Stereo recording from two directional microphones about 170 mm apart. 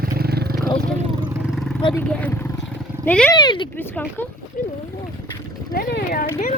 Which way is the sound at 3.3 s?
25° left (ahead or behind).